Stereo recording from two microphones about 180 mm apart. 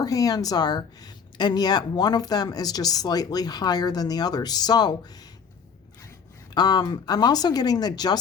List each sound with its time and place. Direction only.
0.0 s speech: 20° left (ahead or behind)
6.5 s speech: 20° left (ahead or behind)